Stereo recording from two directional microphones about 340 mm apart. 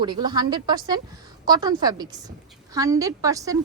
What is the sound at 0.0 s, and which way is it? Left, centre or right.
Speech, centre.